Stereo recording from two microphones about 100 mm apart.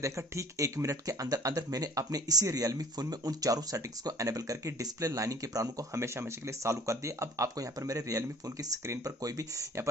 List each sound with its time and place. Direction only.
0.0 s speech: 30° right (ahead or behind)